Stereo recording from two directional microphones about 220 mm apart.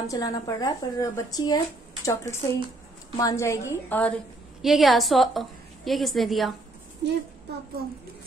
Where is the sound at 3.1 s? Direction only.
15° left (ahead or behind).